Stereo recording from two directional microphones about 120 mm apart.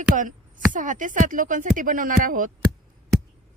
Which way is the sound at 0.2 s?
90° right.